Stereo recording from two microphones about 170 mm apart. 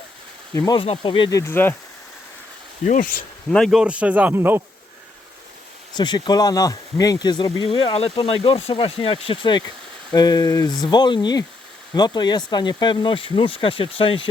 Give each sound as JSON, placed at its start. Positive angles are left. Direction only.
{"t": 0.5, "sound": "speech", "side_deg": 15}
{"t": 0.8, "sound": "speech", "side_deg": 30}
{"t": 2.8, "sound": "speech", "side_deg": 50}
{"t": 3.5, "sound": "speech", "side_deg": 0}
{"t": 5.9, "sound": "speech", "side_deg": 25}